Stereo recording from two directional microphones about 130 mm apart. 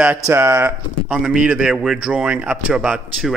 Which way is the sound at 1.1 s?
5° right (ahead or behind).